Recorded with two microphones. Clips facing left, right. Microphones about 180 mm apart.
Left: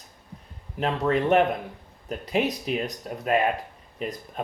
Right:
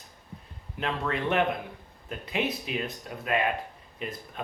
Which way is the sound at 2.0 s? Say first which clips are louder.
Left 5 dB; 40° left (ahead or behind).